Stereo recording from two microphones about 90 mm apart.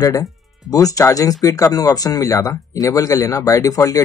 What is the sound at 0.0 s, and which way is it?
Speech, 40° left (ahead or behind).